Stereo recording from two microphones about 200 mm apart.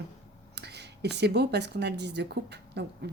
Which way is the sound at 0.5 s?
55° right (ahead or behind).